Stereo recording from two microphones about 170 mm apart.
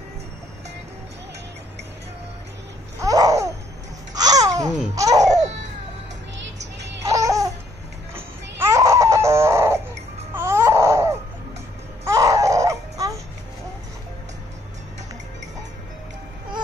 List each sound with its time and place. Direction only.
3.0 s laughter: 20° right (ahead or behind)
7.0 s music: 20° right (ahead or behind)
8.1 s a sound: 15° right (ahead or behind)
10.3 s baby cry: 15° right (ahead or behind)